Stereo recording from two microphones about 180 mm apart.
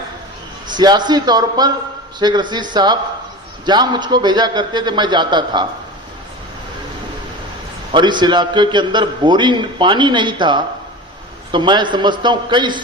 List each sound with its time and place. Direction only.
0.7 s a man's voice: 25° right (ahead or behind)
7.9 s a man's voice: 25° right (ahead or behind)